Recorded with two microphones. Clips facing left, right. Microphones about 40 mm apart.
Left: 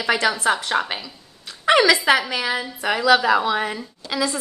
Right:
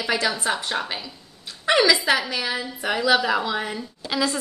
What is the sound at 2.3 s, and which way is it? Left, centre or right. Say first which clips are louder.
A woman's voice: left 3 dB; left.